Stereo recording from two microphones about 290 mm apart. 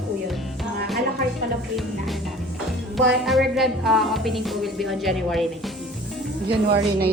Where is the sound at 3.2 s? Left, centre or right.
Centre.